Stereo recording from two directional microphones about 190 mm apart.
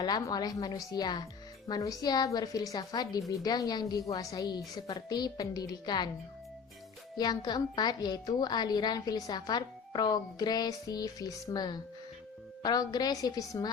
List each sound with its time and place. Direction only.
0.0 s a woman's voice: 20° left (ahead or behind)
7.2 s a woman's voice: 20° left (ahead or behind)